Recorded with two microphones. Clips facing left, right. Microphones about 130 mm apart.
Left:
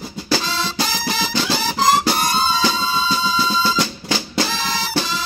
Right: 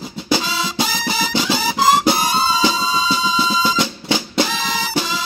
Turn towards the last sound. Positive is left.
turn(degrees=-5)  # may be behind; listen again after turning